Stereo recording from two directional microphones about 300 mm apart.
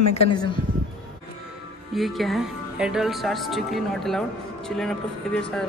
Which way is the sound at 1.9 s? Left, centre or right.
Centre.